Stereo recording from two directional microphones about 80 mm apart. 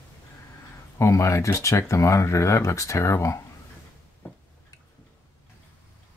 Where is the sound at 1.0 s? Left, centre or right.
Left.